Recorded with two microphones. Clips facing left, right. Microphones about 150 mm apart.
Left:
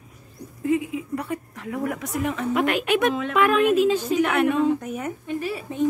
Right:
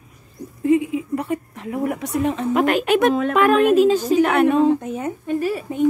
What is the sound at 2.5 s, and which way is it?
Speech, 40° right (ahead or behind).